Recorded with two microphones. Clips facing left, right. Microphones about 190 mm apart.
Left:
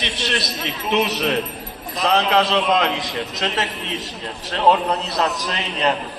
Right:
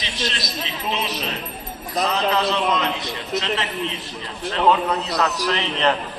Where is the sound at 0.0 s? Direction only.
65° left (ahead or behind).